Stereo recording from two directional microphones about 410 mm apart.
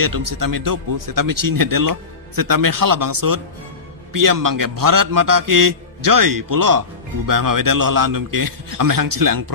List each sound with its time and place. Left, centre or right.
0.0 s speech: right